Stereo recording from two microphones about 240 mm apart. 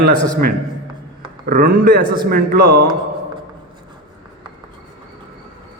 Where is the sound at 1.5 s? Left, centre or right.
Right.